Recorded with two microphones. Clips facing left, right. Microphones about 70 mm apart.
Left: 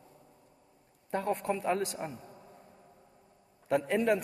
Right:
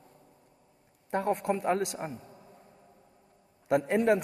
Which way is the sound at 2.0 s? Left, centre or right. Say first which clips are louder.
Right 2 dB; right.